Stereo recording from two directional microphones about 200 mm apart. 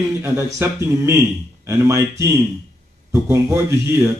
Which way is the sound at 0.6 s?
15° right (ahead or behind).